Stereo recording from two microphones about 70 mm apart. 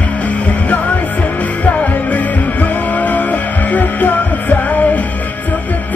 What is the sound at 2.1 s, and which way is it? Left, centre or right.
Music, left.